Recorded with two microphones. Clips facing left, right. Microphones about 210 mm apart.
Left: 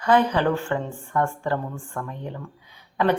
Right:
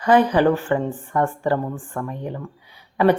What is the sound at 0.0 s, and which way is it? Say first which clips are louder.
Speech: right 4 dB; 10° right (ahead or behind).